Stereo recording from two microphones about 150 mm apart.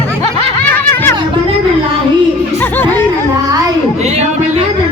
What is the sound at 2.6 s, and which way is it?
Music, 15° left (ahead or behind).